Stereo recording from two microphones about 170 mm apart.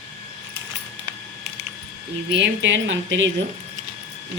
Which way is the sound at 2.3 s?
90° right.